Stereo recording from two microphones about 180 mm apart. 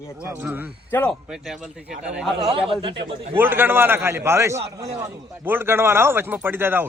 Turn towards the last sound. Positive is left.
turn(degrees=-10)  # may be behind; listen again after turning